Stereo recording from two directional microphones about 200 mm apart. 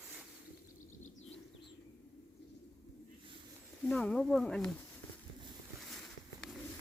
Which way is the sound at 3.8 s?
5° left (ahead or behind).